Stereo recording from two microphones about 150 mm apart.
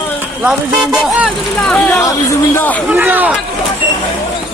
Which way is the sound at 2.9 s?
10° right (ahead or behind).